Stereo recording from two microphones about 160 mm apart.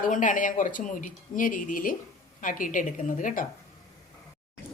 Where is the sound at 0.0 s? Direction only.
55° left (ahead or behind).